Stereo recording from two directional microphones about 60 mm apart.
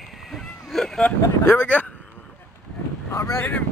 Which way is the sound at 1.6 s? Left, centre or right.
Left.